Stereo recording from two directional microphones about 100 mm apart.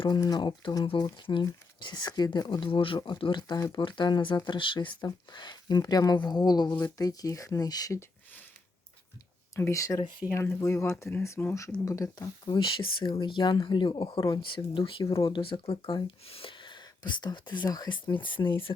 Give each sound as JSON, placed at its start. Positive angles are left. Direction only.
{"t": 0.2, "sound": "speech", "side_deg": 45}
{"t": 3.6, "sound": "speech", "side_deg": 40}
{"t": 9.6, "sound": "speech", "side_deg": 30}
{"t": 12.5, "sound": "speech", "side_deg": 60}